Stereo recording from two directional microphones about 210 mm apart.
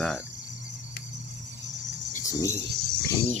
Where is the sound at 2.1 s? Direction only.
35° left (ahead or behind).